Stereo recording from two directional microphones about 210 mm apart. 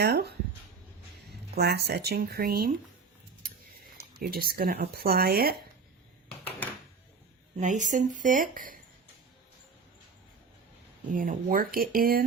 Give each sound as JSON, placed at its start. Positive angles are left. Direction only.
{"t": 0.0, "sound": "speech", "side_deg": -50}
{"t": 1.5, "sound": "speech", "side_deg": -50}
{"t": 4.2, "sound": "speech", "side_deg": -45}
{"t": 7.6, "sound": "speech", "side_deg": -35}
{"t": 11.1, "sound": "speech", "side_deg": -40}